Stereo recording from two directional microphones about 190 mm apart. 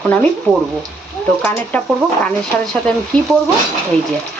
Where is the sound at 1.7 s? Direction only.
5° left (ahead or behind).